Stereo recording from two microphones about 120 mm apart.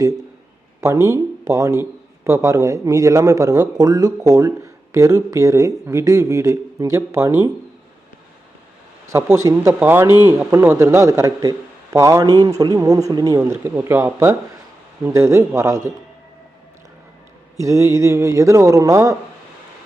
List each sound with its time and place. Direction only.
0.8 s a man's voice: 25° right (ahead or behind)
9.1 s a man's voice: 25° right (ahead or behind)
13.7 s a man's voice: 20° right (ahead or behind)
17.6 s a man's voice: 25° right (ahead or behind)